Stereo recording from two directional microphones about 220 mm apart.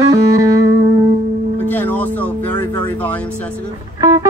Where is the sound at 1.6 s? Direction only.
10° left (ahead or behind).